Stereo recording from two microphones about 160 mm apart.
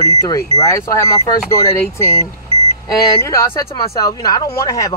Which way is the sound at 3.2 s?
20° left (ahead or behind).